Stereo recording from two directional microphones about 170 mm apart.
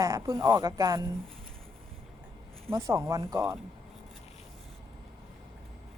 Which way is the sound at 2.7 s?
20° right (ahead or behind).